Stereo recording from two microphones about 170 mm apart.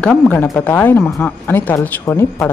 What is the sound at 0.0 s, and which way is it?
Speech, 10° left (ahead or behind).